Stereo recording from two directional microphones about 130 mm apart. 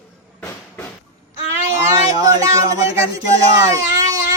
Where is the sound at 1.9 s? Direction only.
25° right (ahead or behind).